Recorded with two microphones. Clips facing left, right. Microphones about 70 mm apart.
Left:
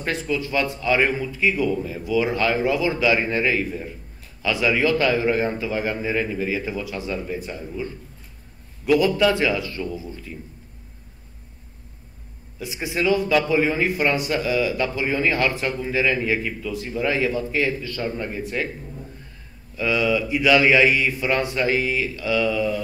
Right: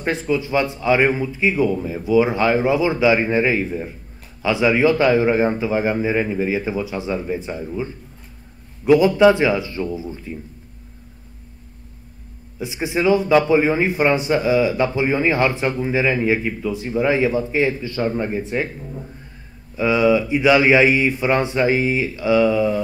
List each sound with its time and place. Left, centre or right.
0.0 s a man's voice: right
12.5 s a man's voice: right